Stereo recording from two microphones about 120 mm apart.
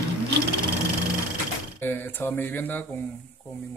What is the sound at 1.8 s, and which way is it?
Speech, 15° left (ahead or behind).